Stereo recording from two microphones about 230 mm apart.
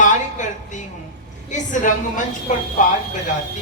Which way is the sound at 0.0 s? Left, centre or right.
Left.